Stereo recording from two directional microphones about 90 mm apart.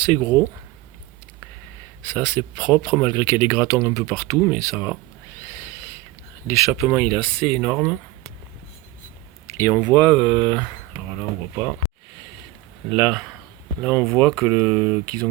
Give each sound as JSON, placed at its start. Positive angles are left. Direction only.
{"t": 0.0, "sound": "speech", "side_deg": 20}
{"t": 2.1, "sound": "speech", "side_deg": 15}
{"t": 6.5, "sound": "speech", "side_deg": 35}
{"t": 6.9, "sound": "speech", "side_deg": 10}
{"t": 9.5, "sound": "speech", "side_deg": 30}
{"t": 12.9, "sound": "speech", "side_deg": 0}
{"t": 13.8, "sound": "speech", "side_deg": 10}